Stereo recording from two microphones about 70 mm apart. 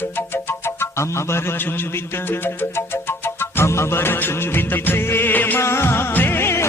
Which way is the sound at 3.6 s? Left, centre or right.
Left.